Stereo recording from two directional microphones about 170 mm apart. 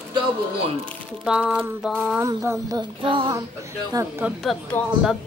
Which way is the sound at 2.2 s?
15° right (ahead or behind).